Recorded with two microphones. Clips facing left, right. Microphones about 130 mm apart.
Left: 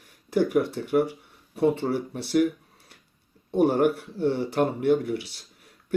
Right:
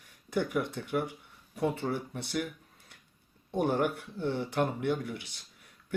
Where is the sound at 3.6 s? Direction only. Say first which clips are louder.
Left 7 dB; 50° left (ahead or behind).